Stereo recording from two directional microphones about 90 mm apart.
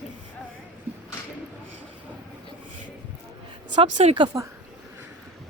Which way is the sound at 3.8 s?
65° right (ahead or behind).